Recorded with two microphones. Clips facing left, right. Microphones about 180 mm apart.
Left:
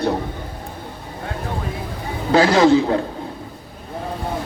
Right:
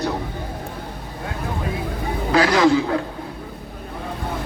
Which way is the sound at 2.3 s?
30° left (ahead or behind).